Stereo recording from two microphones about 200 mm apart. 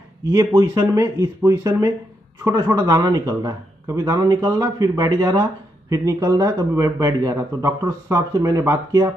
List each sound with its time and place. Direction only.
0.3 s a man's voice: 15° right (ahead or behind)